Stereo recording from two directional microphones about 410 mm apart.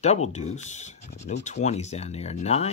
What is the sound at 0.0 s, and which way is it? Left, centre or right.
Speech, centre.